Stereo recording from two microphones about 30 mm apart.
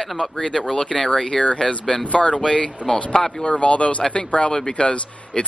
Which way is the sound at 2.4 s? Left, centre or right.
Left.